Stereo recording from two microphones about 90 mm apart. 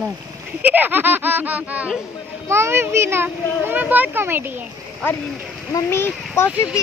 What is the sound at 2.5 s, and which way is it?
A child's voice, 30° right (ahead or behind).